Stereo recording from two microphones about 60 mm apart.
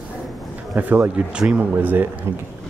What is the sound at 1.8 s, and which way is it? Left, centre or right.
Speech, right.